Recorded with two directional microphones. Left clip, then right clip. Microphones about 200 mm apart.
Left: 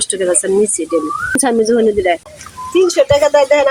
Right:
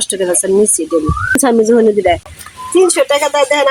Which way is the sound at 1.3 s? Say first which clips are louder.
Right 3 dB; 45° right (ahead or behind).